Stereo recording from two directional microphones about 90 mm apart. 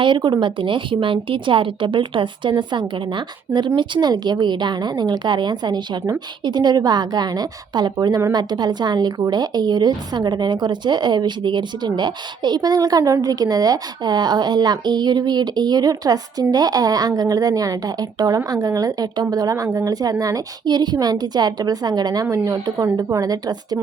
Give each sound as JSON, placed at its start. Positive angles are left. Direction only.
{"t": 0.0, "sound": "a woman's voice", "side_deg": -60}